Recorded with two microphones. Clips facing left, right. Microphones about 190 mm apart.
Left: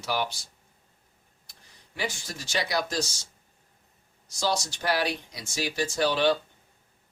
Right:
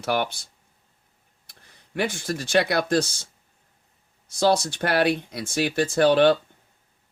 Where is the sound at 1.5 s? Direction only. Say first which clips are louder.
Right 11 dB; 60° right (ahead or behind).